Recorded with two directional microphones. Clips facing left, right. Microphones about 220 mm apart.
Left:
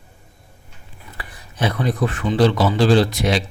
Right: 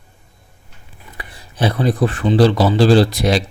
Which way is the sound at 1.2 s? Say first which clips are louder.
Right 3 dB; 30° right (ahead or behind).